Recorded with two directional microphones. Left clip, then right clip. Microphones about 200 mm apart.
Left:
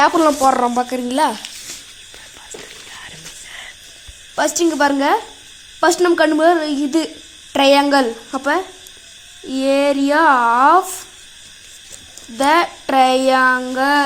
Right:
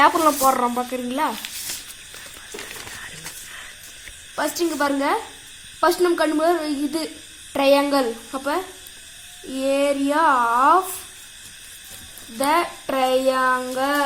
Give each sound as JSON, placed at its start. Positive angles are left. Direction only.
{"t": 0.0, "sound": "child singing", "side_deg": 50}
{"t": 4.4, "sound": "a woman's voice", "side_deg": 55}
{"t": 7.5, "sound": "child singing", "side_deg": 55}
{"t": 9.6, "sound": "a woman's voice", "side_deg": 50}
{"t": 12.4, "sound": "child singing", "side_deg": 50}